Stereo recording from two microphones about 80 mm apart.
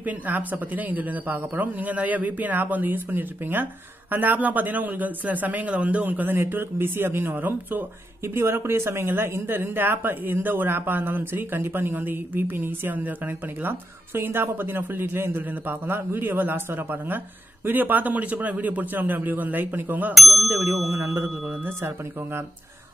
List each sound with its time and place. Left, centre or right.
0.0 s speech: right
20.2 s speech: centre
20.9 s speech: right